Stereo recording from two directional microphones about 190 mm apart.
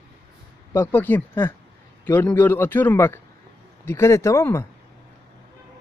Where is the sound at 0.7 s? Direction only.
10° left (ahead or behind).